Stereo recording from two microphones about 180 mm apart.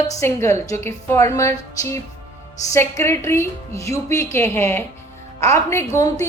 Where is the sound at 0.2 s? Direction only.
15° left (ahead or behind).